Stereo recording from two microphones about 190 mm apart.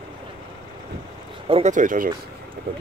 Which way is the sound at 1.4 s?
35° right (ahead or behind).